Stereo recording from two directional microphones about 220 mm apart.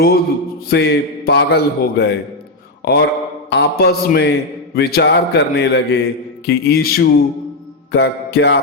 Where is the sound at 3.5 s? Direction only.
50° left (ahead or behind).